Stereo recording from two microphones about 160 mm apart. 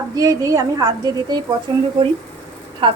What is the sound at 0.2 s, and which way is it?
A woman's voice, 20° right (ahead or behind).